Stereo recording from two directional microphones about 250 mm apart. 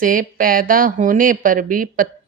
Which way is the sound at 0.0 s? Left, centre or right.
Right.